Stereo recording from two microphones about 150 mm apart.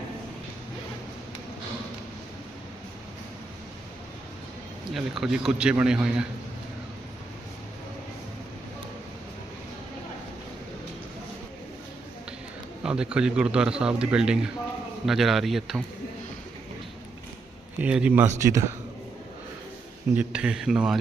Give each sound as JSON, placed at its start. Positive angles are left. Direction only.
{"t": 4.9, "sound": "a man's voice", "side_deg": -5}
{"t": 12.8, "sound": "a man's voice", "side_deg": -5}
{"t": 17.7, "sound": "speech", "side_deg": -10}
{"t": 20.1, "sound": "a man's voice", "side_deg": -5}